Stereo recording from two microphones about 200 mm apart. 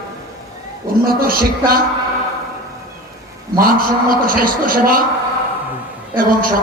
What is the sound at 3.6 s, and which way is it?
A man's voice, 45° right (ahead or behind).